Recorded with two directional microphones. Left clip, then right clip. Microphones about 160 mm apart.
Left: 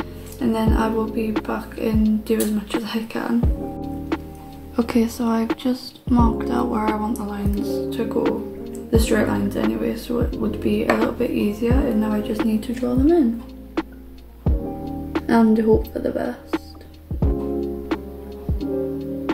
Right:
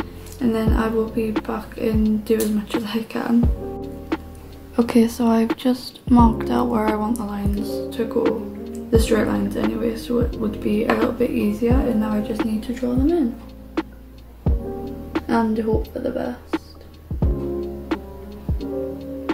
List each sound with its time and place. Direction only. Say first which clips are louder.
0.0 s speech: right 1 dB; centre (ahead or behind)
4.8 s a woman's voice: right 4 dB; 15° right (ahead or behind)
7.5 s speech: left 2 dB; 5° right (ahead or behind)
12.4 s a woman's voice: left 1 dB; 20° left (ahead or behind)
13.8 s hum: even; centre (ahead or behind)
14.4 s music: even; centre (ahead or behind)
15.2 s a woman's voice: left 4 dB; 25° left (ahead or behind)
16.5 s music: even; centre (ahead or behind)